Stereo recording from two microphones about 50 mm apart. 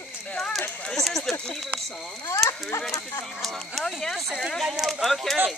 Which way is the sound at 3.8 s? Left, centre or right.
Centre.